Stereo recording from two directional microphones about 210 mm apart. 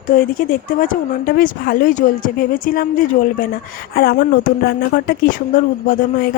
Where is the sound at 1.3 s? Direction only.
45° left (ahead or behind).